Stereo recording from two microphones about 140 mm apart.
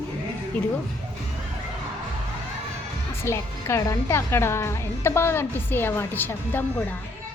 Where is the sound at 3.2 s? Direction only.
20° left (ahead or behind).